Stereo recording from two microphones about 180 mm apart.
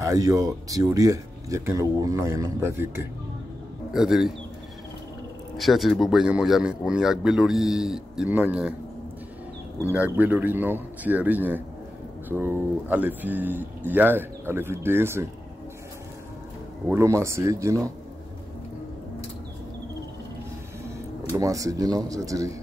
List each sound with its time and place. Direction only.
0.0 s speech: 20° right (ahead or behind)
3.9 s speech: 5° right (ahead or behind)
5.6 s speech: centre (ahead or behind)
9.9 s speech: 10° right (ahead or behind)
16.8 s speech: 15° right (ahead or behind)
21.3 s speech: 20° right (ahead or behind)